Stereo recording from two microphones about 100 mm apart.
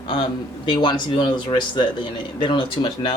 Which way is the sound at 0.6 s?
55° left (ahead or behind).